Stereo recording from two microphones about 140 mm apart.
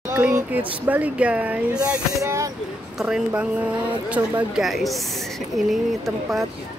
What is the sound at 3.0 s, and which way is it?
Speech, 5° right (ahead or behind).